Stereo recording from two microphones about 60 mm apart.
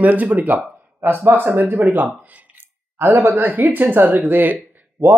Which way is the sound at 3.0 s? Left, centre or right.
Right.